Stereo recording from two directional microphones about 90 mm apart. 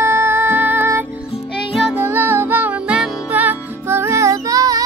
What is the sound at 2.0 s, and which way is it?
Music, 25° right (ahead or behind).